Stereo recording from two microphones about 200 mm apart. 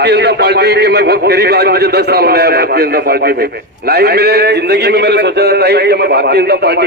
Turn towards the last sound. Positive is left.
turn(degrees=-55)  # may be behind; listen again after turning